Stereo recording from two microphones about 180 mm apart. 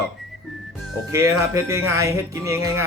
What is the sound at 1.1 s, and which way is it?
Speech, 15° right (ahead or behind).